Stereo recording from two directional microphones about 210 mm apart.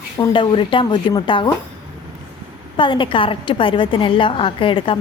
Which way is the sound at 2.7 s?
25° left (ahead or behind).